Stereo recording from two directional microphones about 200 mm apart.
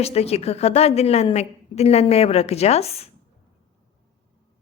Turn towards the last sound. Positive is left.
turn(degrees=30)  # may be behind; listen again after turning